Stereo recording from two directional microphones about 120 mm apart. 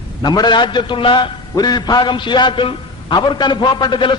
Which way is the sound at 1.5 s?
35° left (ahead or behind).